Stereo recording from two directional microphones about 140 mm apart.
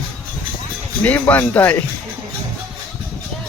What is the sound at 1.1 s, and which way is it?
Speech, 15° left (ahead or behind).